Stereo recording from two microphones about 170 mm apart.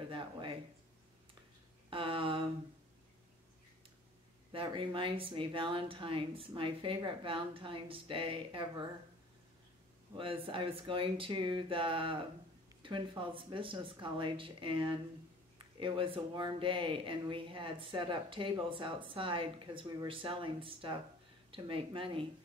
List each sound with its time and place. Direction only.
0.1 s speech: 30° right (ahead or behind)
1.9 s speech: 30° right (ahead or behind)
4.5 s speech: 30° right (ahead or behind)
10.1 s speech: 30° right (ahead or behind)